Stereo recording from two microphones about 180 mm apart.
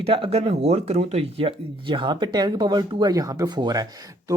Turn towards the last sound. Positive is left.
turn(degrees=-20)  # may be behind; listen again after turning